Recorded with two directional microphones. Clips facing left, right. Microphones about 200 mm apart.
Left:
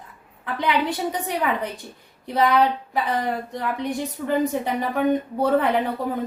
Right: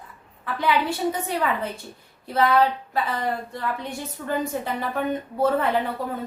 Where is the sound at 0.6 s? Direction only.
15° left (ahead or behind).